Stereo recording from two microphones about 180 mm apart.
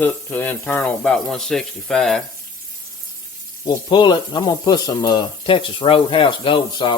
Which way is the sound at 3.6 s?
25° left (ahead or behind).